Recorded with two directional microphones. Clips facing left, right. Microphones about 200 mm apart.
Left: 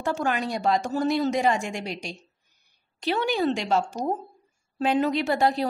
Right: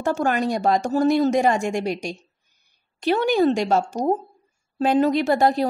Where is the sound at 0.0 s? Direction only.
45° right (ahead or behind).